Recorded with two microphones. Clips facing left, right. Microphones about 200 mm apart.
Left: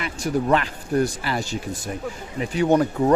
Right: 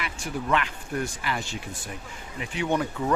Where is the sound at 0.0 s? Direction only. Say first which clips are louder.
Left 8 dB; 40° left (ahead or behind).